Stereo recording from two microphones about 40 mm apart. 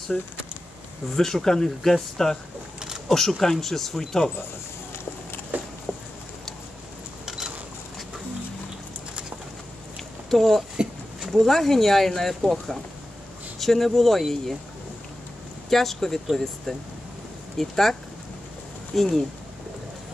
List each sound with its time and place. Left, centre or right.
0.1 s speech: centre
5.5 s a sound: right
7.2 s a sound: centre
10.3 s speech: centre
15.7 s speech: centre
18.9 s speech: centre